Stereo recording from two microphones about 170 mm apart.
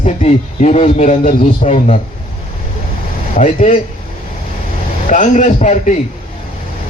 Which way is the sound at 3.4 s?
50° left (ahead or behind).